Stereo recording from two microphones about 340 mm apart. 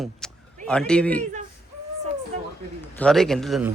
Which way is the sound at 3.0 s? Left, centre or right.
Centre.